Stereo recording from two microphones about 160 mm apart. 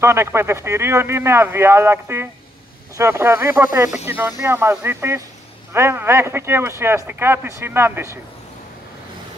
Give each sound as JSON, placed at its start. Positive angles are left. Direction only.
{"t": 0.0, "sound": "speech", "side_deg": -15}